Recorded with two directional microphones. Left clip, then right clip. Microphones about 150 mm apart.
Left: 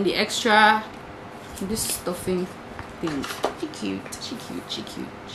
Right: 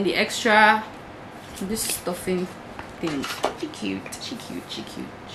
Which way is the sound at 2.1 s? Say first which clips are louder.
Even; centre (ahead or behind).